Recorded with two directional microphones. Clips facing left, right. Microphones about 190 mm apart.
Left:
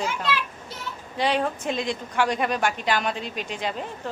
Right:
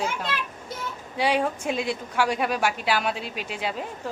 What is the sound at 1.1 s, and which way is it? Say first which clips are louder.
A woman's voice: even; 10° right (ahead or behind).